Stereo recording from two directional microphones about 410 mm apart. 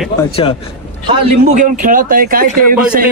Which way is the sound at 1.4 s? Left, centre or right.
Centre.